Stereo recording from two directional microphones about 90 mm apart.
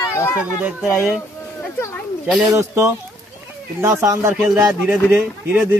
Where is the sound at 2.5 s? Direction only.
35° right (ahead or behind).